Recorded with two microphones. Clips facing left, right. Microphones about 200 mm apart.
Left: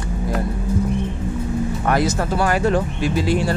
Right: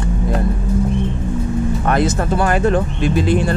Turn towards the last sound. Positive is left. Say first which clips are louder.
# right 3 dB
turn(degrees=-20)  # may be behind; listen again after turning